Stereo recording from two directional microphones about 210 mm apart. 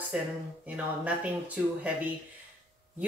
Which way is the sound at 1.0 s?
5° right (ahead or behind).